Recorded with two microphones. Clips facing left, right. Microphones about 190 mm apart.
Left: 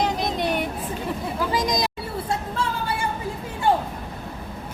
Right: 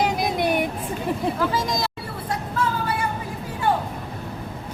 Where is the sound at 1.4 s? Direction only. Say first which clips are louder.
Even; 15° left (ahead or behind).